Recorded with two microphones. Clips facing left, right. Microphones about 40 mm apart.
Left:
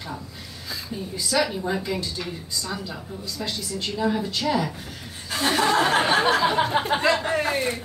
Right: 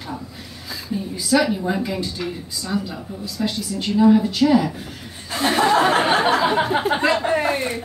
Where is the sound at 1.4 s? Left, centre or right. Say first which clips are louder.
Even; centre.